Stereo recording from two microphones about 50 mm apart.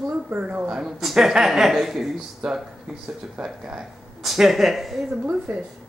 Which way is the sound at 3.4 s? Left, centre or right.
Centre.